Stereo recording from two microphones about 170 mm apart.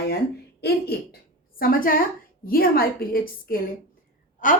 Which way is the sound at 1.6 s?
60° left (ahead or behind).